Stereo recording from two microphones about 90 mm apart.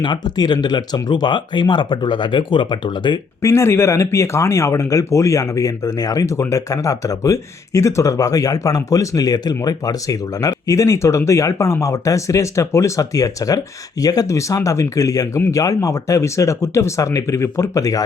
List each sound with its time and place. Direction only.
0.0 s speech: 55° left (ahead or behind)
3.4 s speech: 30° left (ahead or behind)